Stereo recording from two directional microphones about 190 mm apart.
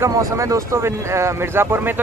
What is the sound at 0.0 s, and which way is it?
Speech, 15° right (ahead or behind).